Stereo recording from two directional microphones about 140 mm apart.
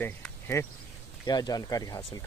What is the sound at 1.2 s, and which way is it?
Speech, 30° left (ahead or behind).